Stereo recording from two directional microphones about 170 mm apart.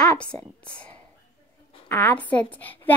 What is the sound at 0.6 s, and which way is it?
Whispering, 5° left (ahead or behind).